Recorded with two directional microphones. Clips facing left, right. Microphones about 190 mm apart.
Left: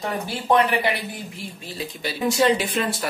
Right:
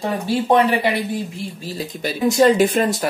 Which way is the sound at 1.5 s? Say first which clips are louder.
Right 5 dB; 40° right (ahead or behind).